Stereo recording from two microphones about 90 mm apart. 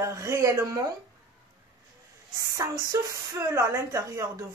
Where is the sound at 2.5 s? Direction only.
40° right (ahead or behind).